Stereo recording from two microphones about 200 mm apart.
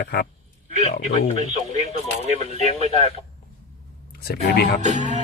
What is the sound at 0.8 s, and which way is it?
Speech, 30° left (ahead or behind).